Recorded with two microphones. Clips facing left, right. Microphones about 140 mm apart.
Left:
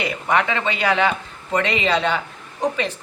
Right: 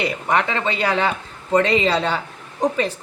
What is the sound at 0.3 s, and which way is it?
Speech, 35° right (ahead or behind).